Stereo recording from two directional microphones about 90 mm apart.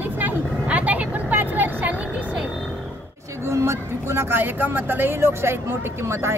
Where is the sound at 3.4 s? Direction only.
30° right (ahead or behind).